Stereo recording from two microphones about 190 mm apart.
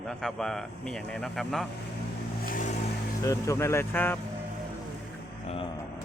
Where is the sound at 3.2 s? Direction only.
15° left (ahead or behind).